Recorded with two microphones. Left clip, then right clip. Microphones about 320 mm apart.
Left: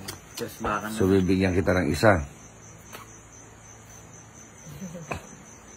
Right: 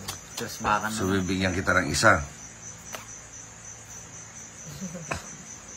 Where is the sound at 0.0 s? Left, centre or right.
Centre.